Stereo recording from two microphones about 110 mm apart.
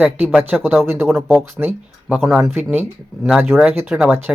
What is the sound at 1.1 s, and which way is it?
Speech, centre (ahead or behind).